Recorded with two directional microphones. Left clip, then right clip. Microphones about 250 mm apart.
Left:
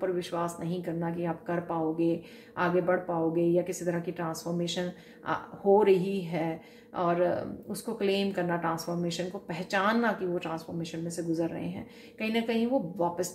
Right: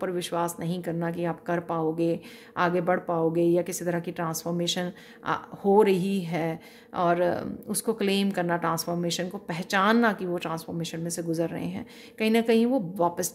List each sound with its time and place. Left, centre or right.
0.0 s speech: right